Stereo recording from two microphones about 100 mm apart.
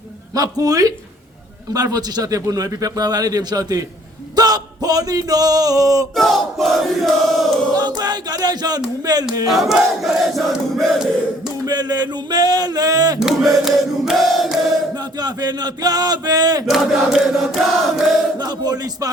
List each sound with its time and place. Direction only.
0.3 s a man's voice: 35° right (ahead or behind)
4.4 s a sound: 40° right (ahead or behind)
6.1 s battle cry: centre (ahead or behind)
7.8 s a man's voice: 40° right (ahead or behind)
9.5 s battle cry: centre (ahead or behind)
11.6 s a man's voice: 45° right (ahead or behind)
13.1 s battle cry: 5° right (ahead or behind)
14.9 s a sound: 45° right (ahead or behind)
16.6 s battle cry: 5° right (ahead or behind)
18.3 s a sound: 45° right (ahead or behind)